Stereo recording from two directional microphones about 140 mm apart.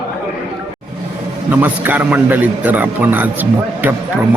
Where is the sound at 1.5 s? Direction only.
15° right (ahead or behind).